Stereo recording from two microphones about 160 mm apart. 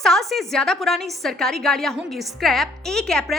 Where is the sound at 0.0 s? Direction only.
Centre (ahead or behind).